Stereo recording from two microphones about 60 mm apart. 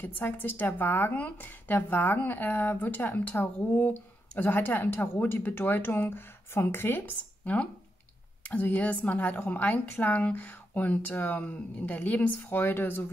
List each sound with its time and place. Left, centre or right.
0.0 s a woman's voice: left
7.5 s a woman's voice: left